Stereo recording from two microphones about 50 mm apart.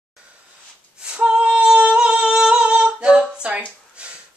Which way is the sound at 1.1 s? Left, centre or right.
Centre.